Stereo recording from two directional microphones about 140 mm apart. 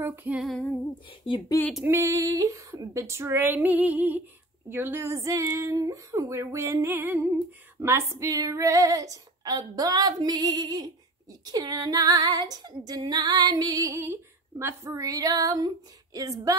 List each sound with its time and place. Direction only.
0.0 s female singing: 15° right (ahead or behind)
0.5 s female singing: 5° left (ahead or behind)
1.9 s female singing: 20° right (ahead or behind)